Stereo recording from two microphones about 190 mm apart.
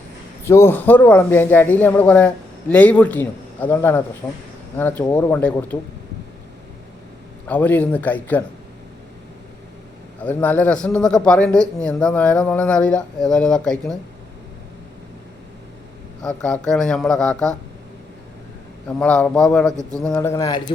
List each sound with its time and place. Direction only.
0.4 s a man's voice: 15° left (ahead or behind)
7.4 s a man's voice: 10° left (ahead or behind)
10.2 s speech: 10° left (ahead or behind)
16.2 s speech: 5° left (ahead or behind)
18.9 s a man's voice: 5° left (ahead or behind)